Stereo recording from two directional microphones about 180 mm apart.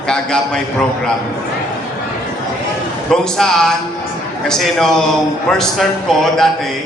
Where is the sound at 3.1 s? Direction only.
5° left (ahead or behind).